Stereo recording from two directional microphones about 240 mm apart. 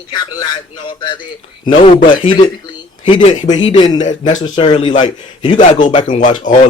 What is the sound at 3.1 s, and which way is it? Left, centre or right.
A man's voice, left.